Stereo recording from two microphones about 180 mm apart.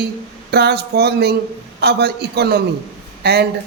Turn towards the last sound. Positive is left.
turn(degrees=-65)  # may be behind; listen again after turning